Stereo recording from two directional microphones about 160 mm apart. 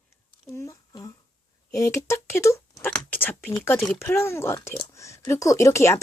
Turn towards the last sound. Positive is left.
turn(degrees=20)  # may be behind; listen again after turning